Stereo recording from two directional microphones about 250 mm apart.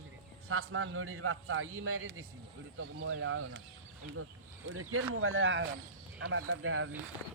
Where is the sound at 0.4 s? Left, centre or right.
Right.